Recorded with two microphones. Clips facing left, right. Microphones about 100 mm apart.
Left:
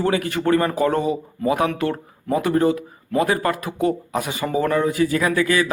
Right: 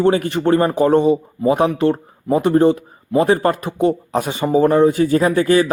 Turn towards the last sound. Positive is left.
turn(degrees=-35)  # may be behind; listen again after turning